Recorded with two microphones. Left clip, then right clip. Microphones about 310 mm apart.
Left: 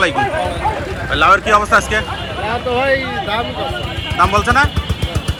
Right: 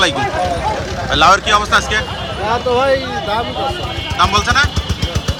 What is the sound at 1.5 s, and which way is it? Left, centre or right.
Speech, centre.